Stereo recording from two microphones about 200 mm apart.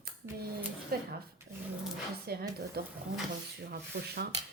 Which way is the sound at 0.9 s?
50° right (ahead or behind).